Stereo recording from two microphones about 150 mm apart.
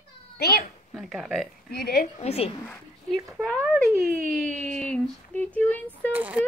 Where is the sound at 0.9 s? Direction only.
5° right (ahead or behind).